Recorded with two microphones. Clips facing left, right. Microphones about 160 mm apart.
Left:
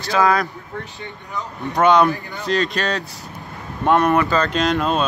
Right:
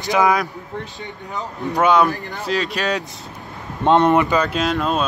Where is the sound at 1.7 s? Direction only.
5° right (ahead or behind).